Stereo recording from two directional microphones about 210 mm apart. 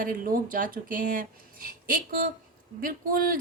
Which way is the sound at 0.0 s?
40° right (ahead or behind).